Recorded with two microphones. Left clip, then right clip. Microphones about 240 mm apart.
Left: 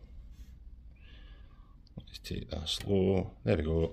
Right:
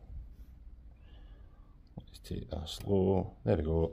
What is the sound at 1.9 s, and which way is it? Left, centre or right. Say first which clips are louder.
Speech: left 3 dB; centre.